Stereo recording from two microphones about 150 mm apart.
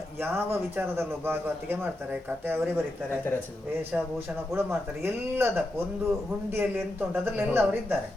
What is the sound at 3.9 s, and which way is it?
A man's voice, 10° right (ahead or behind).